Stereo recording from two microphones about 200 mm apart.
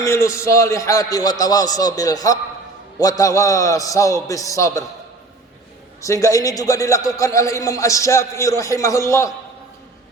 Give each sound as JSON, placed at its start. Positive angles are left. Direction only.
{"t": 0.0, "sound": "a man's voice", "side_deg": 15}
{"t": 6.0, "sound": "a man's voice", "side_deg": 15}